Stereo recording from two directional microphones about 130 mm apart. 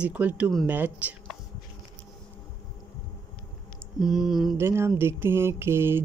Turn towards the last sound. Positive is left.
turn(degrees=-20)  # may be behind; listen again after turning